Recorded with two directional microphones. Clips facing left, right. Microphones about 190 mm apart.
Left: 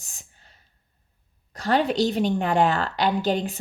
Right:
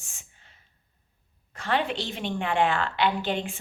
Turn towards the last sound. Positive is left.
turn(degrees=40)  # may be behind; listen again after turning